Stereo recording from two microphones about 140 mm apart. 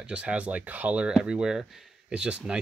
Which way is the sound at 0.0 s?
10° right (ahead or behind).